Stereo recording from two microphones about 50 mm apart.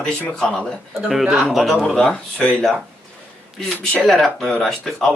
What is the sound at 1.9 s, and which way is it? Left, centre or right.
Speech, centre.